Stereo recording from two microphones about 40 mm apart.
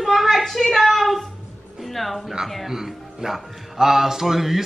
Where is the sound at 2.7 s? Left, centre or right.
Centre.